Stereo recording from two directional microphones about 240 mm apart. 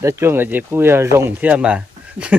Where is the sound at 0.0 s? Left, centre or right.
Centre.